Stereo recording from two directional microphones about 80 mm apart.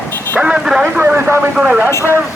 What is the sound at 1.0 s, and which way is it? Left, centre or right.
Speech, right.